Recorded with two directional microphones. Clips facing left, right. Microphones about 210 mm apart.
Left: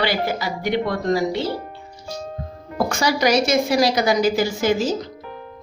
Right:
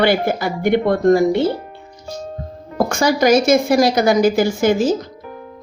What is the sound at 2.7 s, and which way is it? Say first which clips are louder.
Speech: right 4 dB; 50° right (ahead or behind).